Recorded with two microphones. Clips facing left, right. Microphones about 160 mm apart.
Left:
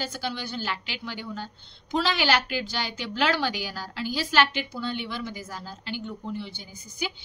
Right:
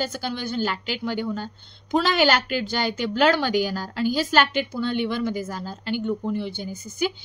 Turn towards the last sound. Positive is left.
turn(degrees=-45)  # may be behind; listen again after turning